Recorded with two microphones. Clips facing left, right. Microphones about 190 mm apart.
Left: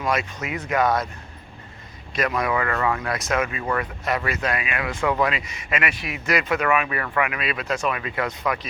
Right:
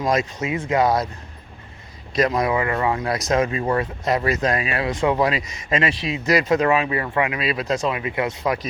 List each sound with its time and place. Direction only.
0.0 s speech: 40° right (ahead or behind)
0.3 s speech: 25° right (ahead or behind)
2.1 s speech: 35° right (ahead or behind)
2.5 s speech: 20° right (ahead or behind)
4.9 s speech: 20° right (ahead or behind)
5.3 s speech: 40° right (ahead or behind)
6.2 s speech: 35° right (ahead or behind)
7.9 s speech: 20° right (ahead or behind)